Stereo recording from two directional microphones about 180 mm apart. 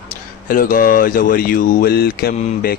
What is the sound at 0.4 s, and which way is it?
Speech, 50° left (ahead or behind).